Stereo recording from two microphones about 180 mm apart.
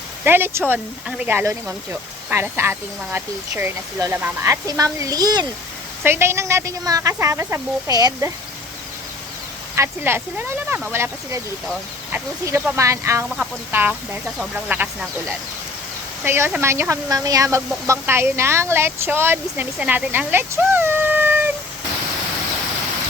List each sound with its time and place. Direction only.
0.3 s speech: 10° right (ahead or behind)
9.7 s speech: 15° right (ahead or behind)
13.2 s speech: 5° right (ahead or behind)
16.2 s speech: 10° right (ahead or behind)